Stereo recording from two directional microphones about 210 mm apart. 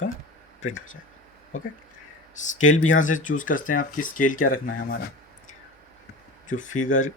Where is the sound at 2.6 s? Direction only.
70° left (ahead or behind).